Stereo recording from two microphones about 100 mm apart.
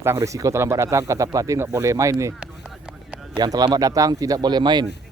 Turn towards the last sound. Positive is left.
turn(degrees=-45)  # may be behind; listen again after turning